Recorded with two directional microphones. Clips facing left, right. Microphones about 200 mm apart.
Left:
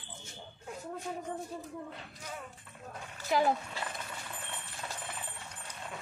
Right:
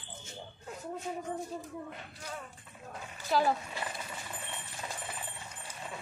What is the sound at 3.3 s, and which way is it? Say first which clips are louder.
Speech: even; 15° left (ahead or behind).